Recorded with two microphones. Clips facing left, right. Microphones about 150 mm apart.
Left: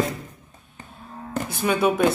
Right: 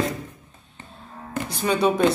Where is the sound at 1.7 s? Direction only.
10° left (ahead or behind).